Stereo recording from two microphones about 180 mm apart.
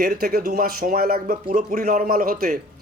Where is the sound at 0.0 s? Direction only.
55° right (ahead or behind).